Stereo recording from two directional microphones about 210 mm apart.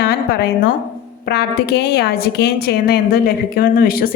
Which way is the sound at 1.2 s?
50° left (ahead or behind).